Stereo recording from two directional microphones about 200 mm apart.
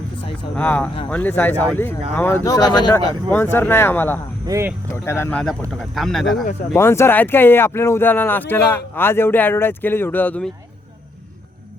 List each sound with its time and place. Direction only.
0.5 s speech: 5° left (ahead or behind)
4.4 s speech: 15° right (ahead or behind)
5.0 s speech: 10° left (ahead or behind)
6.7 s speech: 15° left (ahead or behind)